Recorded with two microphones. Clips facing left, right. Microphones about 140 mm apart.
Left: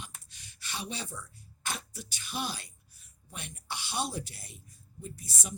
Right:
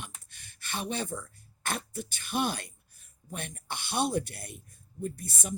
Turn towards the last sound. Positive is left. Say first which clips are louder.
# right 7 dB
turn(degrees=-55)  # may be behind; listen again after turning